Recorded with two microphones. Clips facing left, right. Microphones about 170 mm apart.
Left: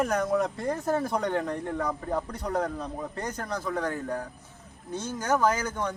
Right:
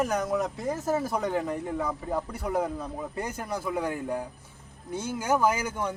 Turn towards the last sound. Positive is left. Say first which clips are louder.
# even
turn(degrees=-10)  # may be behind; listen again after turning